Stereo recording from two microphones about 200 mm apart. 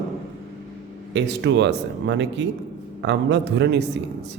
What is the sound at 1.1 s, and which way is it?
A man's voice, 60° right (ahead or behind).